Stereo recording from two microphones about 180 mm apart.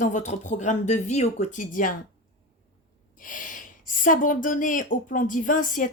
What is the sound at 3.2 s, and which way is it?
A woman's voice, 45° left (ahead or behind).